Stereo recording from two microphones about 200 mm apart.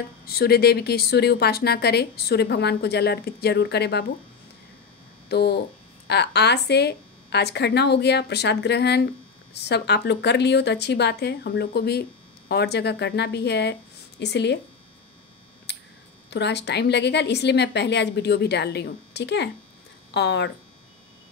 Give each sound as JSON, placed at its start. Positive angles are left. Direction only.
{"t": 0.3, "sound": "speech", "side_deg": 50}
{"t": 5.3, "sound": "a woman's voice", "side_deg": 55}
{"t": 15.7, "sound": "a sound", "side_deg": 55}
{"t": 16.3, "sound": "a woman's voice", "side_deg": 60}